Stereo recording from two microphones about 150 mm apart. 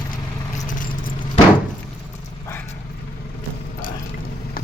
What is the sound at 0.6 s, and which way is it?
Vehicle, 60° left (ahead or behind).